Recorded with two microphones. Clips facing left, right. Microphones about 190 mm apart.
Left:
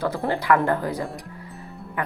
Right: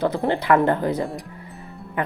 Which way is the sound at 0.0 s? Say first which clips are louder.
Right 3 dB; 20° right (ahead or behind).